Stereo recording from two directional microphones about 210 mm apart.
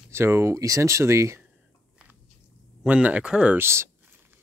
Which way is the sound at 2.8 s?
5° right (ahead or behind).